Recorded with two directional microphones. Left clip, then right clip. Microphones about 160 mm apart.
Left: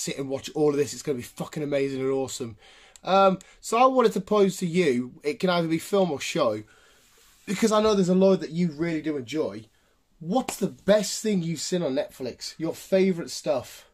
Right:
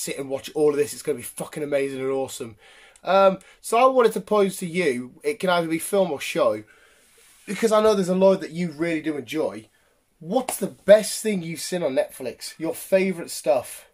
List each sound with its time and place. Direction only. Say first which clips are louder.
0.0 s speech: right 2 dB; 20° left (ahead or behind)
7.4 s speech: right 4 dB; 40° left (ahead or behind); by 9.6 s 10° left (ahead or behind)
10.6 s speech: right 8 dB; 30° left (ahead or behind)